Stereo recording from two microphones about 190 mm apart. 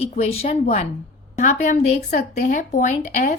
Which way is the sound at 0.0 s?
35° left (ahead or behind).